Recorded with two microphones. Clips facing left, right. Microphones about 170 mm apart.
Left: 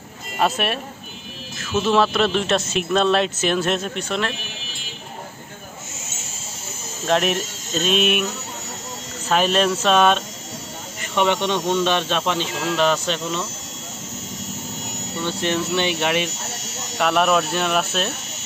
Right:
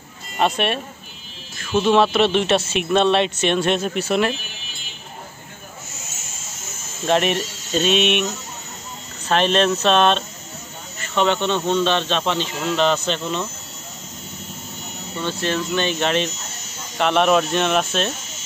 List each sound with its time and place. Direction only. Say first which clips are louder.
0.4 s speech: right 1 dB; 5° left (ahead or behind)
1.8 s speech: right 2 dB; centre (ahead or behind)
7.1 s speech: right 1 dB; centre (ahead or behind)
9.3 s speech: right 1 dB; 5° left (ahead or behind)
14.8 s a sound: left 3 dB; 85° left
15.1 s speech: even; 15° left (ahead or behind)
16.4 s electric shaver: left 4 dB; 80° left
17.0 s speech: right 2 dB; 5° left (ahead or behind)